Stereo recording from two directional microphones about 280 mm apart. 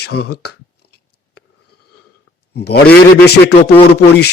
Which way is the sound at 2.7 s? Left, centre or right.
Left.